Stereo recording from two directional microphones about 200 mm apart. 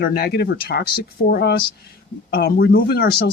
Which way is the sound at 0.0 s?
50° left (ahead or behind).